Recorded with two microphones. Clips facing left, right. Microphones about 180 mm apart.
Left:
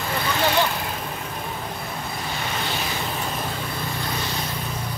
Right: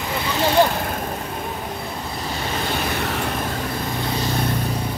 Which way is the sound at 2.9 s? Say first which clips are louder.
Right 4 dB; 65° right (ahead or behind).